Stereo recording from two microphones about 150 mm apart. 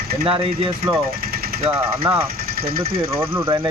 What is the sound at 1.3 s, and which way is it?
Jackhammer, 90° right.